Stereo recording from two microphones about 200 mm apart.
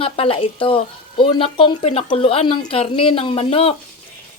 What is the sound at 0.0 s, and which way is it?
A woman's voice, 30° left (ahead or behind).